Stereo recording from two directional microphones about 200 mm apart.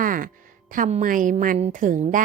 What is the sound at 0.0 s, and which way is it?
Music, 45° right (ahead or behind).